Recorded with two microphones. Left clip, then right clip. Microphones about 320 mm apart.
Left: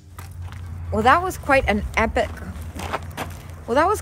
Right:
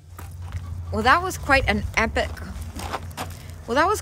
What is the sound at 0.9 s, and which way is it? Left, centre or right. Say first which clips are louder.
Speech: left 2 dB; centre.